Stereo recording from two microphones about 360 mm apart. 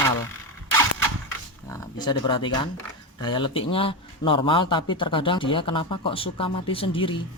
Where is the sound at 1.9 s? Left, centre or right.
Centre.